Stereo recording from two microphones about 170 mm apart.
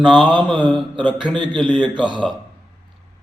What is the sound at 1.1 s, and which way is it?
Speech, 30° right (ahead or behind).